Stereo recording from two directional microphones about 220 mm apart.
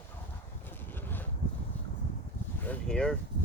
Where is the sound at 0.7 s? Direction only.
10° left (ahead or behind).